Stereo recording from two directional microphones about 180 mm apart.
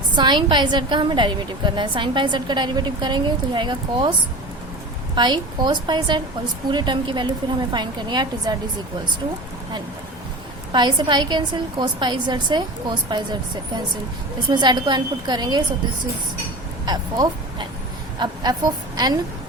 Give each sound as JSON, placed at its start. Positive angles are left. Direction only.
{"t": 0.2, "sound": "a woman's voice", "side_deg": -25}
{"t": 5.1, "sound": "a woman's voice", "side_deg": -25}
{"t": 10.7, "sound": "a woman's voice", "side_deg": -25}
{"t": 14.5, "sound": "a woman's voice", "side_deg": -25}
{"t": 16.8, "sound": "a woman's voice", "side_deg": -20}